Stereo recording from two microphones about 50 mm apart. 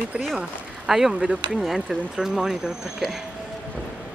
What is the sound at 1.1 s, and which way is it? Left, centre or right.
Speech, right.